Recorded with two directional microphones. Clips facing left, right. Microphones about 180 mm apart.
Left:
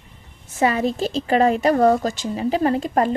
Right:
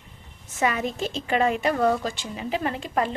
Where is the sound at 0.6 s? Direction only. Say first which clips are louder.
Left 6 dB; 35° left (ahead or behind).